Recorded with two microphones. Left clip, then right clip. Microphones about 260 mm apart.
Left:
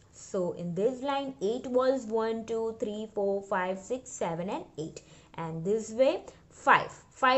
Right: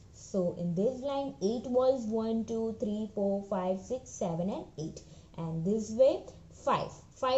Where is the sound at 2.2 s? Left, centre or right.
Left.